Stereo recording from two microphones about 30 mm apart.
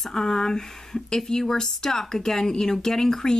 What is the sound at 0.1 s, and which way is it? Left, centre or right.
Speech, centre.